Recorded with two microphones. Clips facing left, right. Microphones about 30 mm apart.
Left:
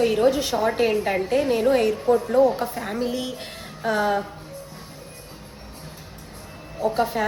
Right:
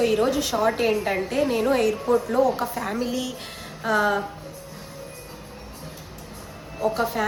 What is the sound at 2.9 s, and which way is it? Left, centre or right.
Speech, left.